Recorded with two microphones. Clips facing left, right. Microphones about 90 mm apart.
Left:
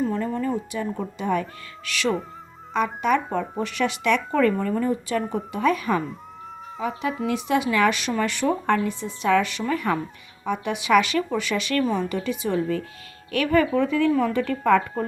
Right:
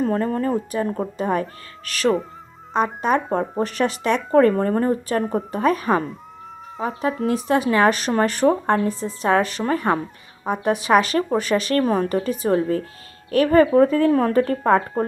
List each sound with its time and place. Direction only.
0.0 s speech: 45° right (ahead or behind)